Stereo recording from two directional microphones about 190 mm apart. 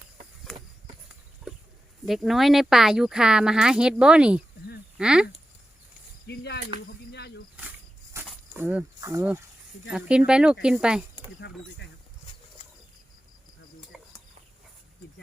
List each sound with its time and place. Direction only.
0.5 s a sound: 5° left (ahead or behind)
2.0 s speech: centre (ahead or behind)
6.2 s speech: 60° left (ahead or behind)
7.1 s snake: 60° left (ahead or behind)
8.1 s snake: 15° right (ahead or behind)
8.5 s speech: 10° right (ahead or behind)
11.4 s speech: 60° left (ahead or behind)
13.9 s a sound: centre (ahead or behind)